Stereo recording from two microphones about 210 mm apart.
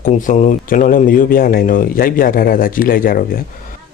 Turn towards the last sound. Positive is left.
turn(degrees=45)  # may be behind; listen again after turning